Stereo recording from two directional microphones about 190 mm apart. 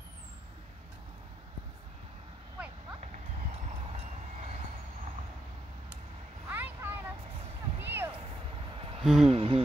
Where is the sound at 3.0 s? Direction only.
35° right (ahead or behind).